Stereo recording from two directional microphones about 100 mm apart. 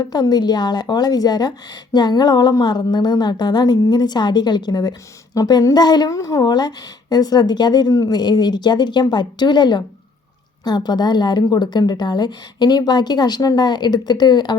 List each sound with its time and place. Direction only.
0.0 s a woman's voice: 40° left (ahead or behind)